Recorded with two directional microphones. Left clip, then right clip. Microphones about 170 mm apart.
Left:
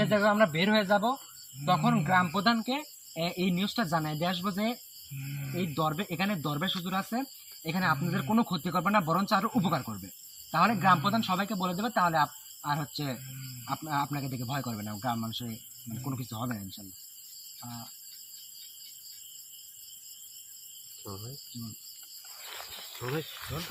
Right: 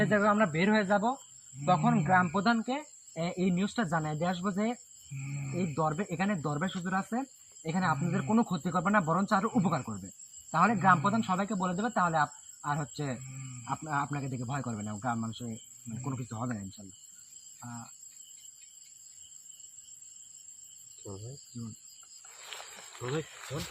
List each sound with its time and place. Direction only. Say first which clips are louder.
0.0 s speech: left 2 dB; 15° right (ahead or behind)
22.5 s a sound: left 3 dB; 5° left (ahead or behind)
23.0 s speech: even; 25° left (ahead or behind)